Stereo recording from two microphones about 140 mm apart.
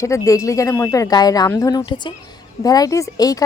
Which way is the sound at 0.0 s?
20° left (ahead or behind).